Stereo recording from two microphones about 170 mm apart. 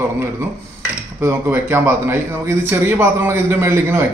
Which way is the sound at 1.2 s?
15° right (ahead or behind).